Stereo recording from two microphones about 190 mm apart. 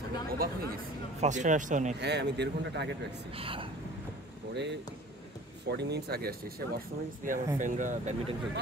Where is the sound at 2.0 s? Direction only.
65° right (ahead or behind).